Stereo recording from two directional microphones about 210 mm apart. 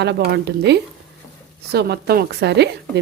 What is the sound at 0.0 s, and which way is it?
Speech, 55° right (ahead or behind).